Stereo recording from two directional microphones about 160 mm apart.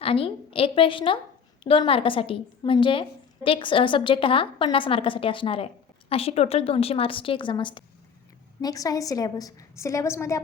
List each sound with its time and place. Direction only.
0.0 s a woman's voice: 35° left (ahead or behind); by 10.4 s 20° left (ahead or behind)